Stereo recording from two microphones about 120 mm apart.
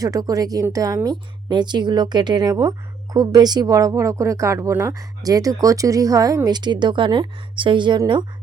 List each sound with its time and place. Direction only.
0.0 s speech: 30° right (ahead or behind)